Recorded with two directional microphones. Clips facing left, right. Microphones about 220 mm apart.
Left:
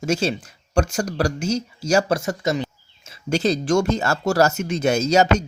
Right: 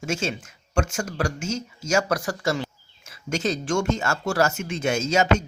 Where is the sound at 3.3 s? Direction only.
35° left (ahead or behind).